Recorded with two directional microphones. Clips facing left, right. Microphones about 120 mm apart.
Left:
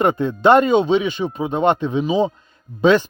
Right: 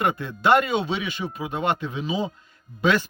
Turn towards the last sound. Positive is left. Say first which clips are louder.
# left 7 dB
turn(degrees=25)  # may be behind; listen again after turning